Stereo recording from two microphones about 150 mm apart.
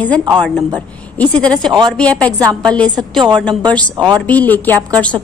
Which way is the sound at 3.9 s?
30° right (ahead or behind).